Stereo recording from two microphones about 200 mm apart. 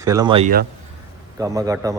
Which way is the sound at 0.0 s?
20° right (ahead or behind).